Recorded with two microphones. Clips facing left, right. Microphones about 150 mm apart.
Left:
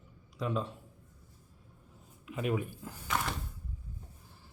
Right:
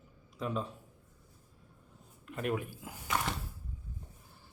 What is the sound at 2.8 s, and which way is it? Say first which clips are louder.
Speech: even; 10° right (ahead or behind).